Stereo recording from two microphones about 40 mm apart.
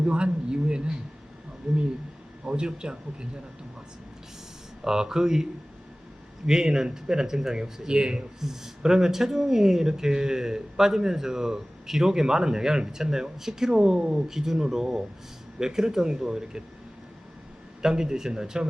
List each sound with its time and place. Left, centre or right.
0.0 s speech: right
2.4 s speech: right
4.8 s speech: centre
8.4 s speech: centre
17.8 s speech: centre